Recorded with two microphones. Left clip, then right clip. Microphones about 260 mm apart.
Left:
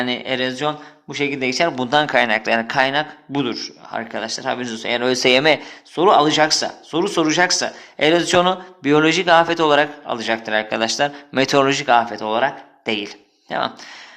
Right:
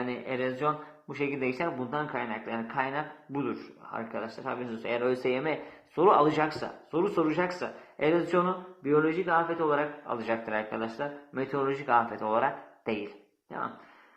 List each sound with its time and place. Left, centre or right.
0.0 s speech: left
6.0 s speech: left
10.8 s speech: left
11.9 s speech: left